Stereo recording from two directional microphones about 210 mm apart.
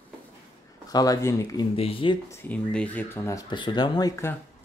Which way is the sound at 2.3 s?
10° left (ahead or behind).